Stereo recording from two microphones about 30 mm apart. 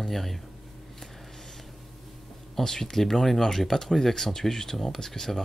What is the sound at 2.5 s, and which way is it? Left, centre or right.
Speech, centre.